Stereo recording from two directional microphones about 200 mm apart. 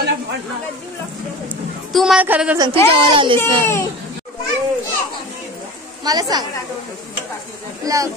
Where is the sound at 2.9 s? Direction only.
25° right (ahead or behind).